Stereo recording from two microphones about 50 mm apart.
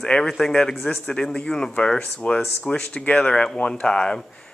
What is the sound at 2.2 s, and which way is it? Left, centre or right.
Speech, left.